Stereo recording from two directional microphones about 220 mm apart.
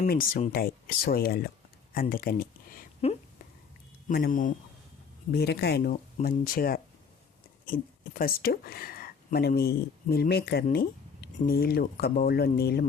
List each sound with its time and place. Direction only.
0.1 s speech: 40° left (ahead or behind)
3.0 s speech: 30° left (ahead or behind)
4.1 s speech: 40° left (ahead or behind)